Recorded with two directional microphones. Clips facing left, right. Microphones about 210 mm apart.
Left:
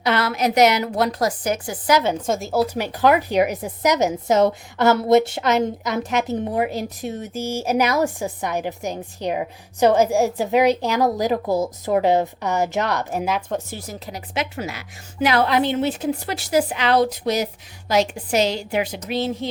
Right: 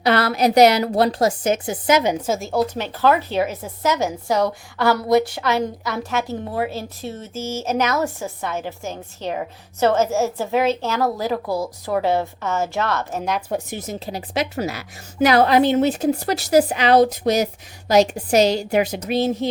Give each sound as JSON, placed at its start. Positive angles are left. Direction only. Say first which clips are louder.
{"t": 0.0, "sound": "a woman's voice", "louder": "right 3 dB", "side_deg": -35}
{"t": 2.2, "sound": "a woman's voice", "louder": "even", "side_deg": 0}
{"t": 13.5, "sound": "a woman's voice", "louder": "right 2 dB", "side_deg": -20}